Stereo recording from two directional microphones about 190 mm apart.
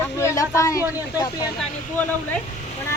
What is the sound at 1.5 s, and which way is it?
Speech, 10° left (ahead or behind).